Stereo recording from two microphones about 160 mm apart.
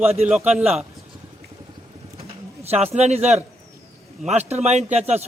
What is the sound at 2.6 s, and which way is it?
A man's voice, 40° right (ahead or behind).